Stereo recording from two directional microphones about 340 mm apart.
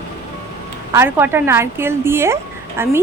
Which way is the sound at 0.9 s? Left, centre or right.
Centre.